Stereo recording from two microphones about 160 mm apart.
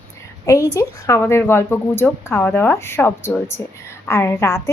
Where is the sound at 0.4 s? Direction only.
20° left (ahead or behind).